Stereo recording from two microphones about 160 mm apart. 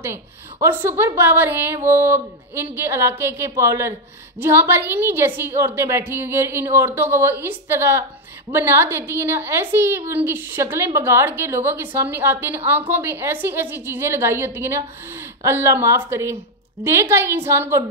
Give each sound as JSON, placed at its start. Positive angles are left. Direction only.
{"t": 0.0, "sound": "a woman's voice", "side_deg": -15}